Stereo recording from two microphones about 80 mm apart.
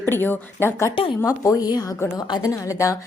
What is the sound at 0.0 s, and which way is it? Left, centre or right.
Speech, left.